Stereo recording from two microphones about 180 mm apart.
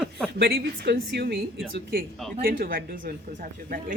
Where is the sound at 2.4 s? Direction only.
55° right (ahead or behind).